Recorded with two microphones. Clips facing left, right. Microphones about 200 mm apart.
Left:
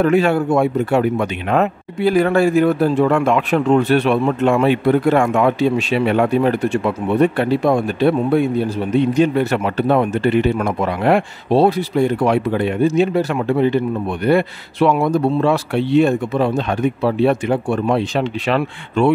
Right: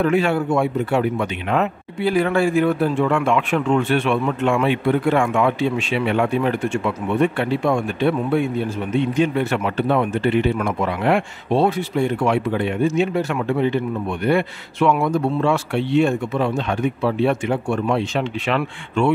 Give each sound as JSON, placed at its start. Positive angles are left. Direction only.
{"t": 0.0, "sound": "speech", "side_deg": 40}